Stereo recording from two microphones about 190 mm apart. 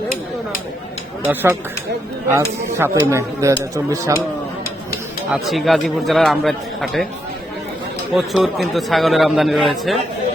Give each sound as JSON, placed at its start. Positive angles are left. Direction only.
{"t": 1.2, "sound": "speech", "side_deg": -10}
{"t": 5.3, "sound": "a man's voice", "side_deg": 0}
{"t": 8.1, "sound": "a man's voice", "side_deg": 0}